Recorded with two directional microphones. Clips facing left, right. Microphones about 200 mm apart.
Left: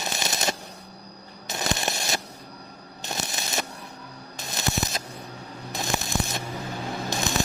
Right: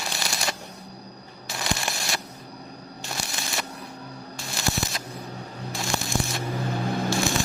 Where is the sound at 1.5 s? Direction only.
20° left (ahead or behind).